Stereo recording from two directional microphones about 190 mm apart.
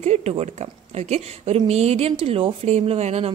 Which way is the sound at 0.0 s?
35° right (ahead or behind).